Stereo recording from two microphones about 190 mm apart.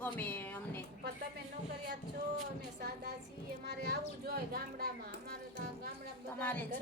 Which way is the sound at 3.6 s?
55° right (ahead or behind).